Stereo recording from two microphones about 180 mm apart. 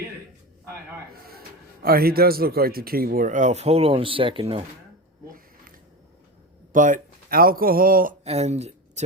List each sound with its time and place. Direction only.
1.3 s a man's voice: 55° right (ahead or behind); by 4.6 s 30° right (ahead or behind)
6.7 s speech: 45° right (ahead or behind)
8.2 s speech: 35° right (ahead or behind)